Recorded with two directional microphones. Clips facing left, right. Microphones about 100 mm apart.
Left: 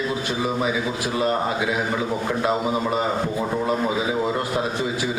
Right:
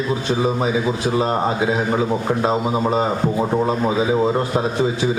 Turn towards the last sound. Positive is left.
turn(degrees=-25)  # may be behind; listen again after turning